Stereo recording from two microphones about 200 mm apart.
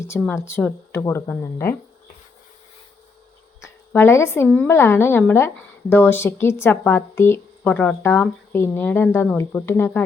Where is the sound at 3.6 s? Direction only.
15° left (ahead or behind).